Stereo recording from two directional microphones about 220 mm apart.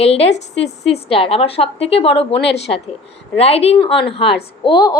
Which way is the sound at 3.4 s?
25° left (ahead or behind).